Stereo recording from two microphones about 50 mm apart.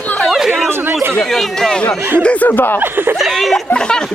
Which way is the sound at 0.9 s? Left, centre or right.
Right.